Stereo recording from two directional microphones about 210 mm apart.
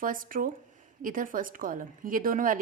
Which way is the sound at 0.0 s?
40° right (ahead or behind).